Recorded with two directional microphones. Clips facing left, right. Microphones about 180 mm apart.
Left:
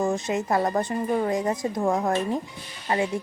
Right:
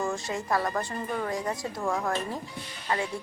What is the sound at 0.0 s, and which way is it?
Speech, 20° left (ahead or behind).